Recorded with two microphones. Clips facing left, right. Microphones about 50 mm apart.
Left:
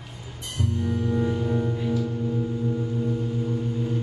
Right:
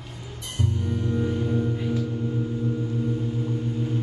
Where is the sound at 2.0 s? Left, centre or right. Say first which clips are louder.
Left 1 dB; centre.